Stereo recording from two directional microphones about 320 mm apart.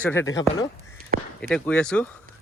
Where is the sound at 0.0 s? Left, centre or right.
Centre.